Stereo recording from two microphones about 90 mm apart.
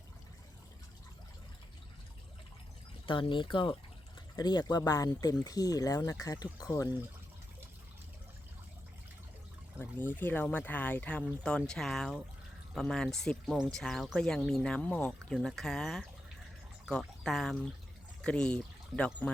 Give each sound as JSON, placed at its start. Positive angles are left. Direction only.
{"t": 3.1, "sound": "speech", "side_deg": 70}
{"t": 4.4, "sound": "speech", "side_deg": 50}
{"t": 9.8, "sound": "speech", "side_deg": 25}
{"t": 17.2, "sound": "speech", "side_deg": 5}